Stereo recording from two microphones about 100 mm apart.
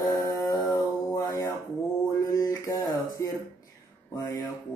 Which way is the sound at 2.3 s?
35° left (ahead or behind).